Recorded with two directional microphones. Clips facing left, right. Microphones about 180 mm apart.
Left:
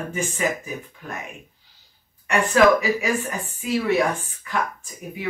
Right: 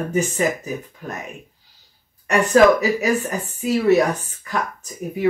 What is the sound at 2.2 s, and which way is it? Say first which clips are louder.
Speech: right 3 dB; 40° right (ahead or behind).